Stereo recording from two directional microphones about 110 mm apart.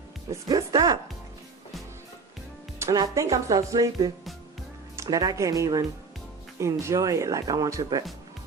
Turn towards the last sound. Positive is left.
turn(degrees=-30)  # may be behind; listen again after turning